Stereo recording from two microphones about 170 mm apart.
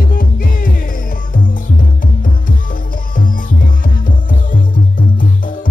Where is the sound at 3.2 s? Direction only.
55° left (ahead or behind).